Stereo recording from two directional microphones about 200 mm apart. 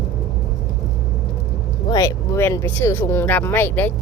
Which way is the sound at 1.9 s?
15° left (ahead or behind).